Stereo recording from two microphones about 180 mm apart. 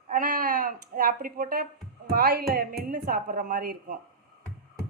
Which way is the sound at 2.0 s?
60° right (ahead or behind).